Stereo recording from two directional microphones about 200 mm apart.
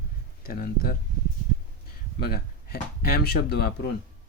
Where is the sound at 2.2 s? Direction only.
50° left (ahead or behind).